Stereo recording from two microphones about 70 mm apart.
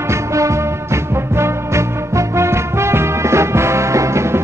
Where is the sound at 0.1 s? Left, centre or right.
Right.